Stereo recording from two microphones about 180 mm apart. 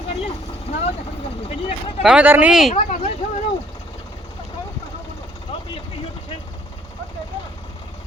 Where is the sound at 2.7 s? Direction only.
35° left (ahead or behind).